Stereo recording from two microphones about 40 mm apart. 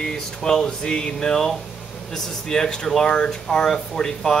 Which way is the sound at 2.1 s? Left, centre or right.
Centre.